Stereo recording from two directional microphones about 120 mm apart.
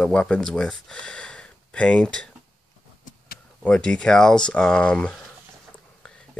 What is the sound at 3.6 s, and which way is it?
Speech, 5° left (ahead or behind).